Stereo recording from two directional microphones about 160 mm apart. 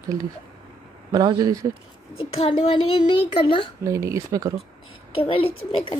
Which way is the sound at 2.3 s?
35° left (ahead or behind).